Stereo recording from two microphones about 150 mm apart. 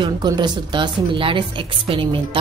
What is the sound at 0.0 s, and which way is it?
Speech, 30° right (ahead or behind).